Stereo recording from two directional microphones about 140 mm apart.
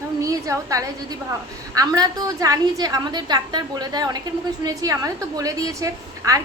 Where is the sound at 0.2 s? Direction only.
25° right (ahead or behind).